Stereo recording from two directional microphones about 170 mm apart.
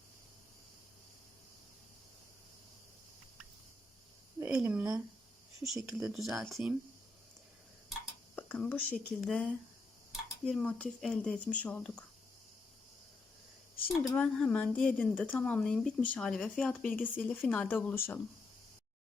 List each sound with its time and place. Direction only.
4.4 s speech: 10° right (ahead or behind)
5.7 s speech: 20° right (ahead or behind)
6.1 s speech: centre (ahead or behind)
8.4 s speech: 10° left (ahead or behind)
14.2 s speech: 5° left (ahead or behind)